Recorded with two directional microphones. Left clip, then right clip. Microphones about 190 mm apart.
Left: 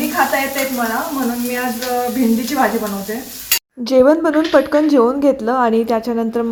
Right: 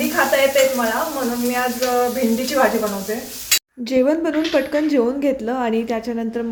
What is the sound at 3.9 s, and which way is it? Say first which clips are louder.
A woman's voice: left 6 dB; 20° left (ahead or behind).